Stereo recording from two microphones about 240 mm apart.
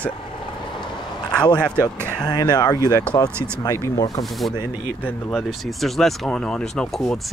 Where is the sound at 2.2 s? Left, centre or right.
Centre.